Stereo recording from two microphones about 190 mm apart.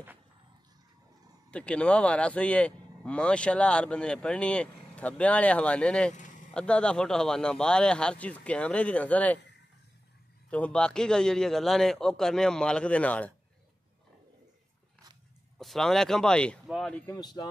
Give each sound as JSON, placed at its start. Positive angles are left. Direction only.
{"t": 1.5, "sound": "speech", "side_deg": 5}
{"t": 6.1, "sound": "a sound", "side_deg": 40}
{"t": 6.5, "sound": "speech", "side_deg": 5}
{"t": 10.5, "sound": "speech", "side_deg": 5}
{"t": 15.5, "sound": "speech", "side_deg": 0}
{"t": 17.2, "sound": "speech", "side_deg": 20}